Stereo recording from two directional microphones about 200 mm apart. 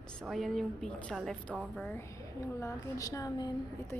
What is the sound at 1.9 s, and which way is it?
A woman's voice, 15° left (ahead or behind).